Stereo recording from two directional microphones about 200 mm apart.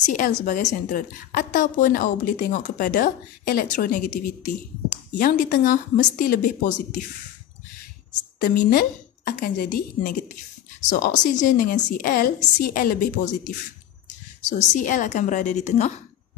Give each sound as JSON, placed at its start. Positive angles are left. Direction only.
{"t": 0.0, "sound": "a woman's voice", "side_deg": 40}
{"t": 8.5, "sound": "a woman's voice", "side_deg": 45}
{"t": 14.7, "sound": "a woman's voice", "side_deg": 40}